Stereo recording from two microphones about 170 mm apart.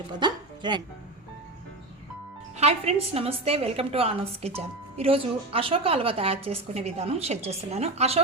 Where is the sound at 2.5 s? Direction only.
40° right (ahead or behind).